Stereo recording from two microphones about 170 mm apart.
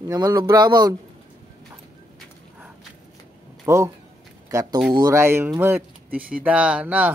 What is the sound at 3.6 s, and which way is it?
Speech, 15° right (ahead or behind).